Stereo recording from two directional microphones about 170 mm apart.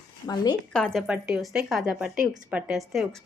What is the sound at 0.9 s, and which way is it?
A woman's voice, 5° right (ahead or behind).